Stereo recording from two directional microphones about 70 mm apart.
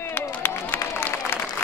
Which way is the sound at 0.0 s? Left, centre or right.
Left.